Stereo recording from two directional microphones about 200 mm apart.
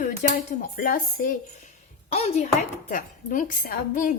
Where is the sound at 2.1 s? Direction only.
30° left (ahead or behind).